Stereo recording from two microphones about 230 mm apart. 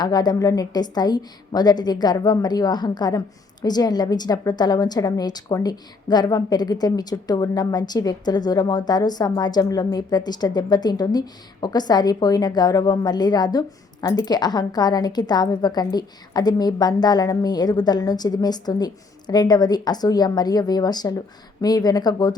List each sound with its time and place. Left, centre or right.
0.0 s a woman's voice: centre